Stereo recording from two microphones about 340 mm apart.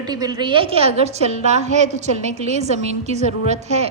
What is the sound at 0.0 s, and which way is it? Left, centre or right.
A woman's voice, centre.